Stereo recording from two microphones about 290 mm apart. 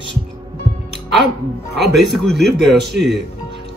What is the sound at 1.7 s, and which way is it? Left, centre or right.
Speech, right.